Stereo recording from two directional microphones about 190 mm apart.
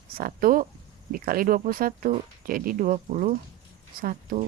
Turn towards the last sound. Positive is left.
turn(degrees=-50)  # may be behind; listen again after turning